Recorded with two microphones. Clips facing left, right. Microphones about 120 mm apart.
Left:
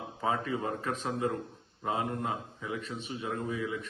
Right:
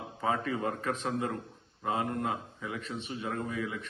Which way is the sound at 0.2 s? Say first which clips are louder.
Right 1 dB; 25° left (ahead or behind).